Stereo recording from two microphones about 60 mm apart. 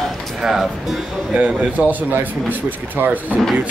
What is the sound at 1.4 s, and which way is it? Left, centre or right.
Speech, right.